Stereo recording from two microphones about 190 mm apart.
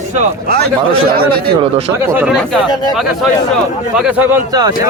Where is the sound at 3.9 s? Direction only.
5° right (ahead or behind).